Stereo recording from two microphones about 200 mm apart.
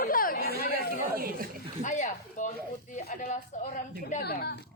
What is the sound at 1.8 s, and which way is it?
Speech, 40° left (ahead or behind).